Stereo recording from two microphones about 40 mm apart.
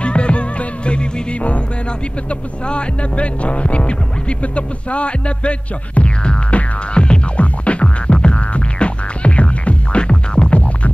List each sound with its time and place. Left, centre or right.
0.0 s music: left
2.7 s music: left